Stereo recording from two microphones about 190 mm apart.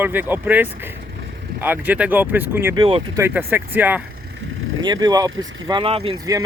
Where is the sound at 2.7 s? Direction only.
25° right (ahead or behind).